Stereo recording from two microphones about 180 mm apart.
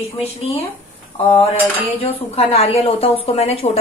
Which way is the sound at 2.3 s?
35° left (ahead or behind).